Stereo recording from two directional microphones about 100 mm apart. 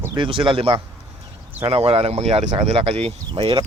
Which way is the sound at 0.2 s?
55° right (ahead or behind).